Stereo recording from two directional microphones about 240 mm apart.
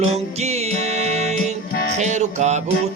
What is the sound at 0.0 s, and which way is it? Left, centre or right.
Music, right.